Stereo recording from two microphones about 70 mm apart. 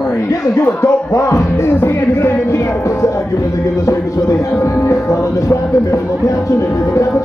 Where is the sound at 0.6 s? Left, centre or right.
Left.